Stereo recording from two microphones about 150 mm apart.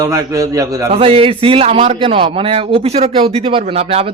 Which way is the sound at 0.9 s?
40° right (ahead or behind).